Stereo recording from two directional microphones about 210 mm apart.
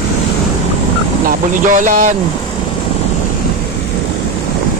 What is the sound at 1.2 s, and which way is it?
Speech, 40° right (ahead or behind).